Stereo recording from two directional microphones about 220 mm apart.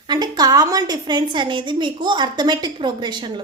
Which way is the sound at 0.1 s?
15° right (ahead or behind).